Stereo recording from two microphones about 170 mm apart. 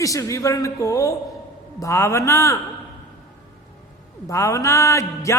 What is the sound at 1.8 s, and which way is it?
Speech, 20° left (ahead or behind).